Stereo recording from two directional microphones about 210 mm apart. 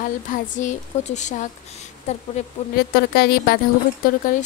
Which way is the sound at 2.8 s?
45° left (ahead or behind).